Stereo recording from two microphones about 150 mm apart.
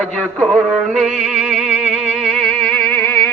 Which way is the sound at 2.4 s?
10° left (ahead or behind).